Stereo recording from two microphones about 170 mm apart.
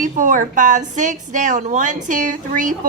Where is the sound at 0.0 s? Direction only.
50° right (ahead or behind).